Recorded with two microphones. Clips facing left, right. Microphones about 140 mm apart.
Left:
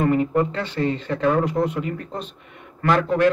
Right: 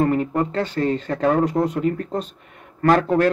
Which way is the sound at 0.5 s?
45° right (ahead or behind).